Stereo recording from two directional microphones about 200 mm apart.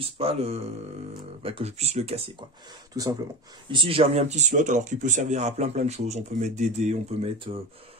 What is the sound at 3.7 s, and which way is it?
Speech, 25° right (ahead or behind).